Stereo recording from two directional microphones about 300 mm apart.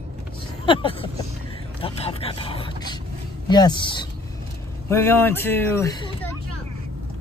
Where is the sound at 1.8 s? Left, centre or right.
Centre.